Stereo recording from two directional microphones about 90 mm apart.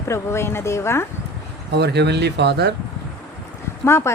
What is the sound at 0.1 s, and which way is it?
Speech, 30° left (ahead or behind).